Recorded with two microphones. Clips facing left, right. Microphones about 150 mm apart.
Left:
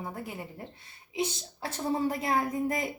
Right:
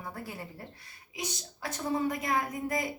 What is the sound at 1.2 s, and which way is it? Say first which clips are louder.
A woman's voice: left 7 dB; 30° left (ahead or behind).